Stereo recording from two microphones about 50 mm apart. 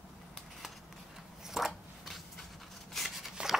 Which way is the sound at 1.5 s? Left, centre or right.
Centre.